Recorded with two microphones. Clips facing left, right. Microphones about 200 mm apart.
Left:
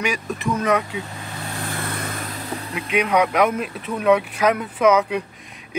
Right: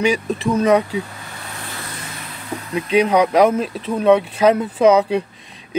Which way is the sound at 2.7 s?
30° right (ahead or behind).